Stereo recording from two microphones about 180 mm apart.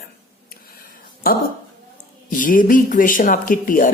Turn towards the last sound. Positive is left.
turn(degrees=50)  # may be behind; listen again after turning